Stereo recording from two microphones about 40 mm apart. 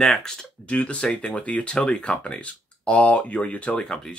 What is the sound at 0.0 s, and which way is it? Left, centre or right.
Speech, centre.